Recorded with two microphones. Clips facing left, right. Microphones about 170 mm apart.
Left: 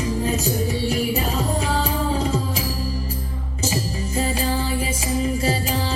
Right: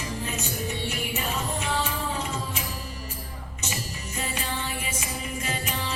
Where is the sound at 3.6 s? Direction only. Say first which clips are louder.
Left 11 dB; 35° left (ahead or behind).